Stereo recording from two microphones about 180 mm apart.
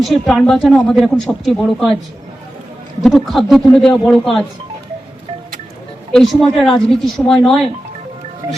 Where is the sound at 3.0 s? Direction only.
Centre (ahead or behind).